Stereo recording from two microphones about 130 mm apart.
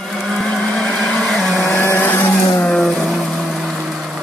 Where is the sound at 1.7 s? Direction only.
20° left (ahead or behind).